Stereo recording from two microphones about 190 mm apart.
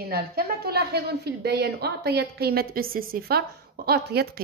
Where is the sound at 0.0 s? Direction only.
55° right (ahead or behind).